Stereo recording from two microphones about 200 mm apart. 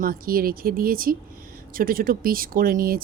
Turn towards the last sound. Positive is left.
turn(degrees=-45)  # may be behind; listen again after turning